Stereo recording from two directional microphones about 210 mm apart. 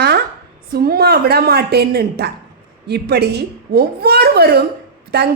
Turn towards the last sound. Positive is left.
turn(degrees=-50)  # may be behind; listen again after turning